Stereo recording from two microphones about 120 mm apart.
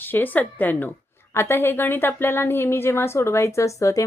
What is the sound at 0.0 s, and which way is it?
A woman's voice, 15° left (ahead or behind).